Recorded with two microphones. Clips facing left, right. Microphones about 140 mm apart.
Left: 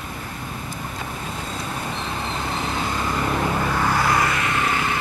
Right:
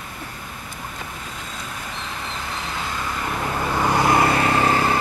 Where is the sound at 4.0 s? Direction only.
25° right (ahead or behind).